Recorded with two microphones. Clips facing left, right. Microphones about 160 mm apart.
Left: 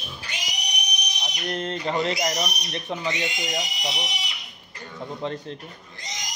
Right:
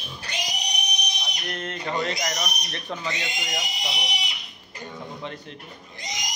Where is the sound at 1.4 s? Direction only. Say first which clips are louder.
Left 5 dB; 30° left (ahead or behind).